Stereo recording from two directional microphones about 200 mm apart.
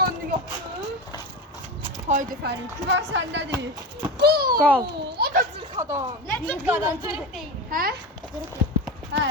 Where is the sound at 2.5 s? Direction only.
65° right (ahead or behind).